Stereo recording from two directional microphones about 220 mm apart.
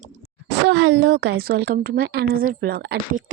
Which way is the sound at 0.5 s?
55° right (ahead or behind).